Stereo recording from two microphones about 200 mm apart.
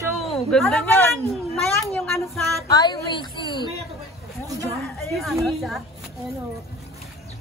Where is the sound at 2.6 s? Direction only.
20° left (ahead or behind).